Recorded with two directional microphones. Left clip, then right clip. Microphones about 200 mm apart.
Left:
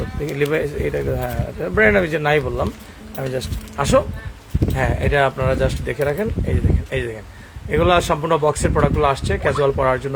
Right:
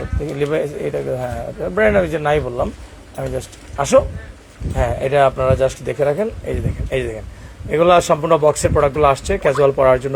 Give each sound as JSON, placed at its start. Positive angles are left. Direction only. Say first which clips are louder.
{"t": 0.3, "sound": "speech", "louder": "right 1 dB", "side_deg": 15}